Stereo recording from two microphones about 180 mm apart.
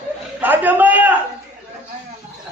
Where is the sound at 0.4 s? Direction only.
10° right (ahead or behind).